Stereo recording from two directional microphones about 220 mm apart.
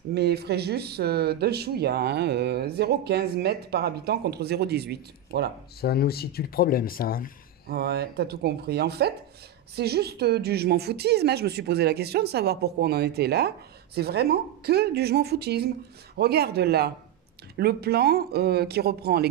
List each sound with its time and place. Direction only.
0.1 s speech: 45° right (ahead or behind)
5.8 s speech: 45° left (ahead or behind)
7.7 s speech: 45° right (ahead or behind)